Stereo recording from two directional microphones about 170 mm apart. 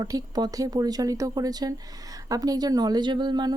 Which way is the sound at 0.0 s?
20° right (ahead or behind).